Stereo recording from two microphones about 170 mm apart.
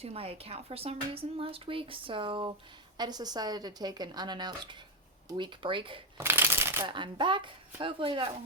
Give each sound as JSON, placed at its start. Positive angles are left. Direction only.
{"t": 0.0, "sound": "speech", "side_deg": -35}
{"t": 6.1, "sound": "shuffling cards", "side_deg": -15}
{"t": 6.8, "sound": "speech", "side_deg": -30}